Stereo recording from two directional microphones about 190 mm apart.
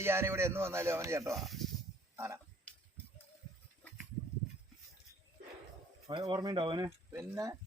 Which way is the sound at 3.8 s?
5° left (ahead or behind).